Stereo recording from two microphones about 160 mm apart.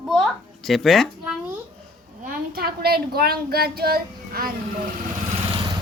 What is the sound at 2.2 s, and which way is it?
A woman's voice, 65° right (ahead or behind).